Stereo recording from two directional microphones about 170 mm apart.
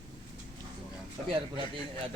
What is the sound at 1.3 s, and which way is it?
Speech, 30° right (ahead or behind).